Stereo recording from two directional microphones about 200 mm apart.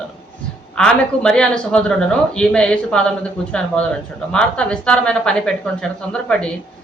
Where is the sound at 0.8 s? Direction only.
5° left (ahead or behind).